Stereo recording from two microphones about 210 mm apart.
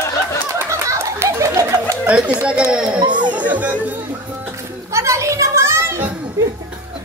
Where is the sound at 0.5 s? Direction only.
15° right (ahead or behind).